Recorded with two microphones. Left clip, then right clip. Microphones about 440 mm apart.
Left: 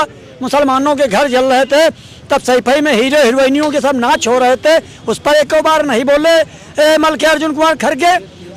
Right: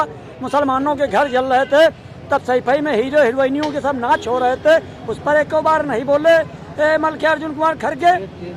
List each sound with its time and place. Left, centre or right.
0.0 s speech: left